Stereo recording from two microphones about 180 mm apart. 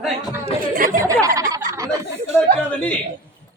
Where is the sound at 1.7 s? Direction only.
15° right (ahead or behind).